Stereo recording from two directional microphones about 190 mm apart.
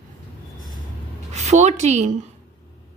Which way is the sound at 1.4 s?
35° right (ahead or behind).